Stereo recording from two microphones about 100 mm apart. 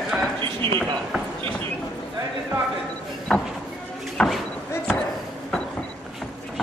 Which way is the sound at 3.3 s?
5° left (ahead or behind).